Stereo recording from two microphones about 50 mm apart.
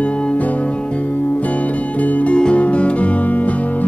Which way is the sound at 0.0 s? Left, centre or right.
Left.